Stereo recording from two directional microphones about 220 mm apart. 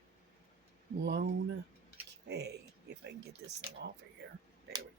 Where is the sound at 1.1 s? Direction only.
50° right (ahead or behind).